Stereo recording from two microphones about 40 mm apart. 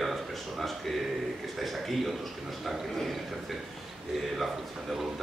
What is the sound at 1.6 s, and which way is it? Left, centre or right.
Speech, centre.